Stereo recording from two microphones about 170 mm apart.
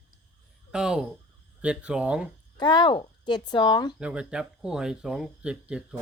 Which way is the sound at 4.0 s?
5° right (ahead or behind).